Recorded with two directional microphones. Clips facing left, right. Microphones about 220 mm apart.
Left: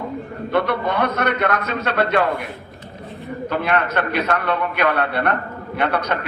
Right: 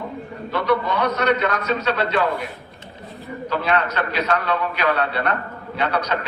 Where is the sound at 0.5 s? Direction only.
55° left (ahead or behind).